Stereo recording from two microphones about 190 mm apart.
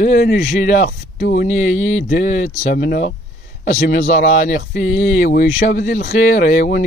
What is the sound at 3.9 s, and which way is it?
Speech, 40° left (ahead or behind).